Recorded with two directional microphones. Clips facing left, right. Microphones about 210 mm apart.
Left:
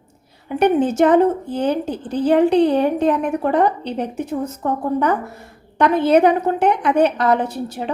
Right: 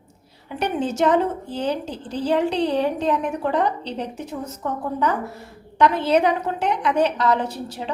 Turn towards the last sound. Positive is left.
turn(degrees=55)  # may be behind; listen again after turning